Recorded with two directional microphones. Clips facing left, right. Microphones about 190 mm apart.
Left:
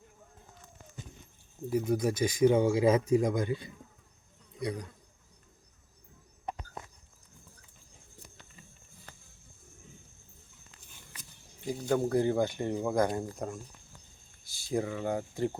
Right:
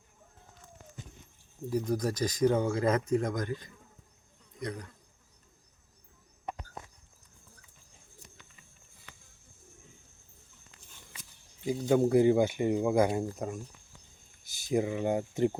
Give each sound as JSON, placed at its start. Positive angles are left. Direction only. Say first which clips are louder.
{"t": 1.7, "sound": "speech", "louder": "left 2 dB", "side_deg": 5}
{"t": 11.9, "sound": "speech", "louder": "right 5 dB", "side_deg": -10}
{"t": 14.4, "sound": "speech", "louder": "right 3 dB", "side_deg": -20}